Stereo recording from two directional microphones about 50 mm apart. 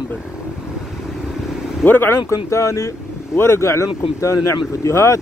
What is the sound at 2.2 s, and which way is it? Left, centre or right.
Speech, left.